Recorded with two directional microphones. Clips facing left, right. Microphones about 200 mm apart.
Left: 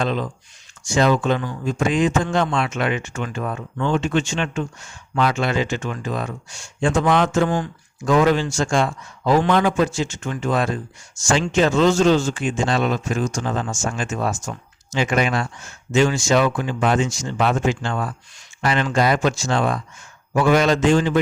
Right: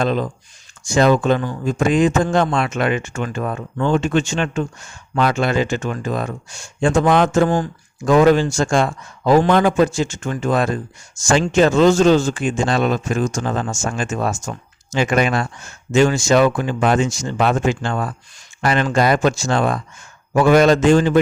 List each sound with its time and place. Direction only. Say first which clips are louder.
0.0 s speech: right 4 dB; 45° right (ahead or behind)